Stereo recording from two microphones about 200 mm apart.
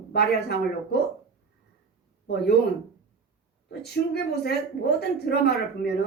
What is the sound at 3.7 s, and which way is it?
A woman's voice, 55° left (ahead or behind).